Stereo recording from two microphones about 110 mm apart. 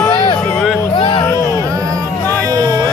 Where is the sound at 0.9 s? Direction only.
50° left (ahead or behind).